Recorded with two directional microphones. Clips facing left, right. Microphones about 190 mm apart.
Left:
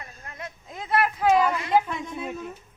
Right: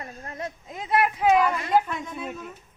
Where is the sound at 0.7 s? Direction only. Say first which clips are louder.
Right 1 dB; 15° right (ahead or behind).